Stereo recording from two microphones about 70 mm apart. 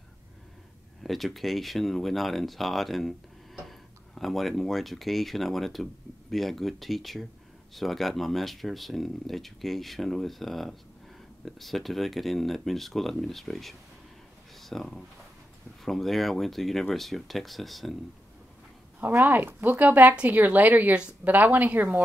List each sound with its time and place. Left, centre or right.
1.0 s speech: centre
18.9 s speech: right